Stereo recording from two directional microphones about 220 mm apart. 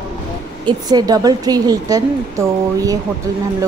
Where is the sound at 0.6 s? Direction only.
15° right (ahead or behind).